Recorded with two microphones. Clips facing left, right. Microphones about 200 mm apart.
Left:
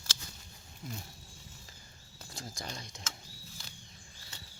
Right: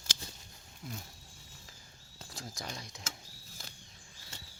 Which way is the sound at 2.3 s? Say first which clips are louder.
Even; centre (ahead or behind).